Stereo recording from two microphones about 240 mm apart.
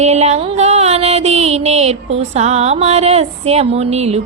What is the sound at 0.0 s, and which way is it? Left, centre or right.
Music, right.